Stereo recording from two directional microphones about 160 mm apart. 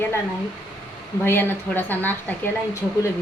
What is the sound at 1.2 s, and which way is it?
A woman's voice, 15° left (ahead or behind).